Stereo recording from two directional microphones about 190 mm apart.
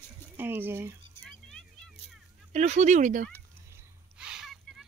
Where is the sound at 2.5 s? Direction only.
35° right (ahead or behind).